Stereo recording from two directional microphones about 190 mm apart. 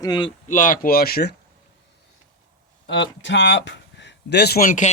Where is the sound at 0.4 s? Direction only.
45° left (ahead or behind).